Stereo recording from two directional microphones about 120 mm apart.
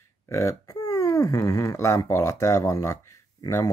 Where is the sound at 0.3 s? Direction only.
25° left (ahead or behind).